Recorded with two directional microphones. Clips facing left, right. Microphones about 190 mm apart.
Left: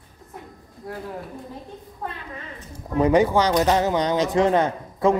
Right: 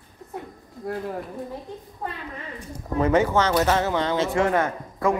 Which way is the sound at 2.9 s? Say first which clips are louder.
Left 2 dB; 15° left (ahead or behind).